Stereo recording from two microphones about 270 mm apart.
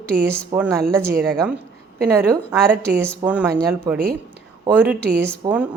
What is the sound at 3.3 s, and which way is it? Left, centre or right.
A woman's voice, centre.